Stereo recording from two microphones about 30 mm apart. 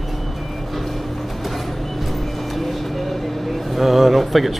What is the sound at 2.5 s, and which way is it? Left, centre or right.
Vehicle, centre.